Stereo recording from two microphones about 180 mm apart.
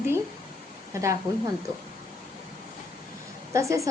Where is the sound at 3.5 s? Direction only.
15° right (ahead or behind).